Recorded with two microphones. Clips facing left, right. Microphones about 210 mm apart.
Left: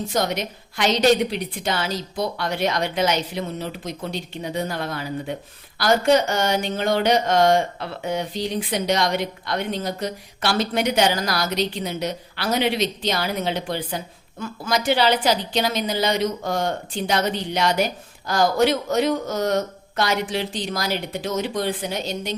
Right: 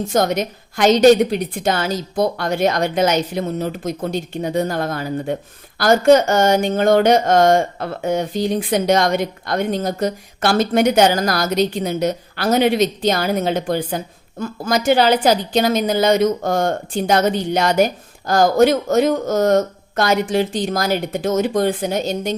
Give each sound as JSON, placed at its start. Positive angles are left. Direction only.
{"t": 0.1, "sound": "a woman's voice", "side_deg": -50}